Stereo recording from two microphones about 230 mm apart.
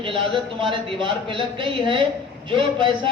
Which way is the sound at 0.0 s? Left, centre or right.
Right.